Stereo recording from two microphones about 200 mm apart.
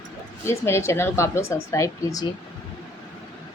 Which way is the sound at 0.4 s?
15° left (ahead or behind).